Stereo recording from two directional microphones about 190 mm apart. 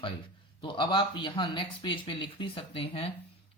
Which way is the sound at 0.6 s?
25° left (ahead or behind).